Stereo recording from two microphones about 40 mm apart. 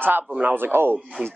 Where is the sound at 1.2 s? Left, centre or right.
Right.